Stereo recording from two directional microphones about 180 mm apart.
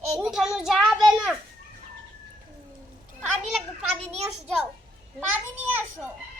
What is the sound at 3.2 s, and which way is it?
Children playing, 5° right (ahead or behind).